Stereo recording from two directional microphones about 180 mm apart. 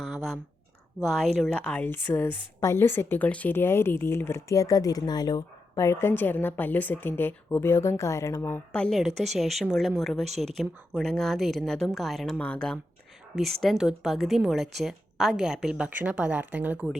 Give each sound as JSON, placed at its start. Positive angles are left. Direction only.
{"t": 0.0, "sound": "a sound", "side_deg": 0}
{"t": 0.9, "sound": "a woman's voice", "side_deg": 0}
{"t": 10.2, "sound": "speech", "side_deg": -40}
{"t": 10.5, "sound": "a woman's voice", "side_deg": 0}